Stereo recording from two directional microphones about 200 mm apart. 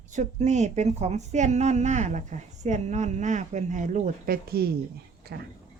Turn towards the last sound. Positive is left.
turn(degrees=-50)  # may be behind; listen again after turning